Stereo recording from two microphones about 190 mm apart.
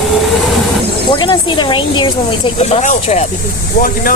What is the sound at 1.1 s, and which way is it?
Speech, 25° left (ahead or behind).